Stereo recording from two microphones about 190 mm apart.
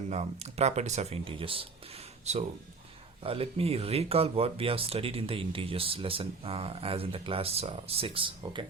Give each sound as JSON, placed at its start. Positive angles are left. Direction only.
{"t": 0.1, "sound": "speech", "side_deg": -35}